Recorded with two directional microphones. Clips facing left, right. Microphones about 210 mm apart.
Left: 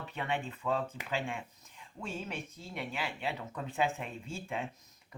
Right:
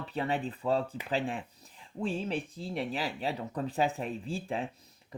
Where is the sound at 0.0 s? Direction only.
35° right (ahead or behind).